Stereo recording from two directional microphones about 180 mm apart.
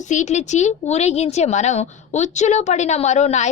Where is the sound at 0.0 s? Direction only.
40° left (ahead or behind).